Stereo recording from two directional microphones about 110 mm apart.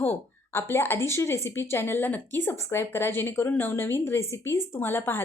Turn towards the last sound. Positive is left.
turn(degrees=20)  # may be behind; listen again after turning